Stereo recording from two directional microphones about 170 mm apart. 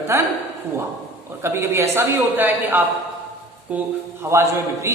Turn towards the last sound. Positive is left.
turn(degrees=-15)  # may be behind; listen again after turning